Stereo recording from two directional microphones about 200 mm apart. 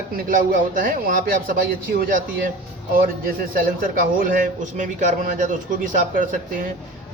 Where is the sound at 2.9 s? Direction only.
45° right (ahead or behind).